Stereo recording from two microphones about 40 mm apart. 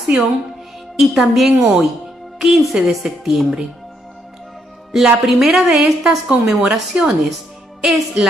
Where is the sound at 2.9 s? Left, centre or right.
Centre.